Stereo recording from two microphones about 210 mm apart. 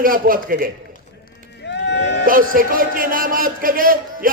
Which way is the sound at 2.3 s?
40° right (ahead or behind).